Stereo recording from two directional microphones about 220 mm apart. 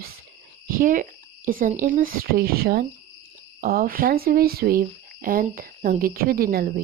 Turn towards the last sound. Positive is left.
turn(degrees=-40)  # may be behind; listen again after turning